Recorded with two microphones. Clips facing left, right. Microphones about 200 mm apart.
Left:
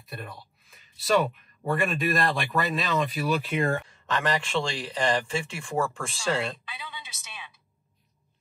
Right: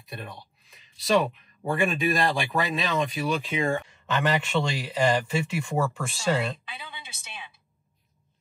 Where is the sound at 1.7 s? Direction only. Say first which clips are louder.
Right 1 dB; centre (ahead or behind).